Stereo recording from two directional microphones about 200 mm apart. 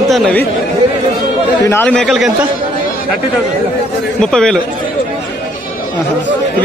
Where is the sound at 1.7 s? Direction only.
10° left (ahead or behind).